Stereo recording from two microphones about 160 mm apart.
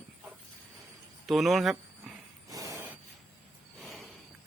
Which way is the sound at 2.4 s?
20° right (ahead or behind).